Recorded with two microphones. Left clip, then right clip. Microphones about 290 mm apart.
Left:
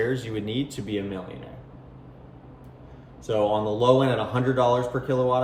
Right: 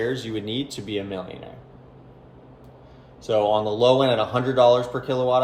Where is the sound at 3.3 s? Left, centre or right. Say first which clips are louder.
Right 3 dB; right.